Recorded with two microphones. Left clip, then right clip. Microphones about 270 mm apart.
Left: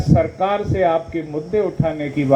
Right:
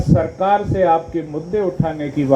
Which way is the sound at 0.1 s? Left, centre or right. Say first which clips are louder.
Right 2 dB; left.